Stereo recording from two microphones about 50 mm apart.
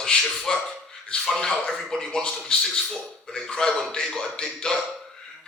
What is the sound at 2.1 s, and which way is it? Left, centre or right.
Speech, centre.